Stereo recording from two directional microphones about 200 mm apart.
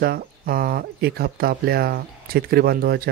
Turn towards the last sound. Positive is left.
turn(degrees=-50)  # may be behind; listen again after turning